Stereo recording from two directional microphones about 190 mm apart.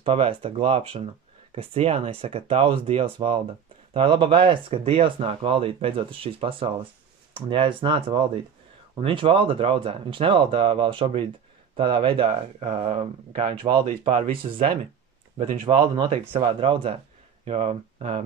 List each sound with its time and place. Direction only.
0.0 s speech: 30° right (ahead or behind)